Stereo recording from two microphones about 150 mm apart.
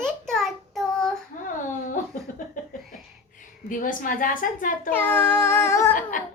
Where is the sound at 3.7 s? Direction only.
65° left (ahead or behind).